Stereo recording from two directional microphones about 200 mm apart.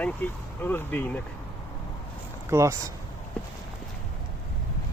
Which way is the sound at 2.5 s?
15° right (ahead or behind).